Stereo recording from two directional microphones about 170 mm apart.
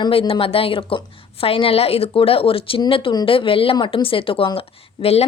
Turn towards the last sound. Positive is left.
turn(degrees=35)  # may be behind; listen again after turning